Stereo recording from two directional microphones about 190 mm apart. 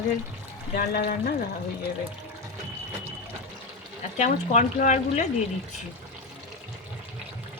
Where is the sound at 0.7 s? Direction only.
55° left (ahead or behind).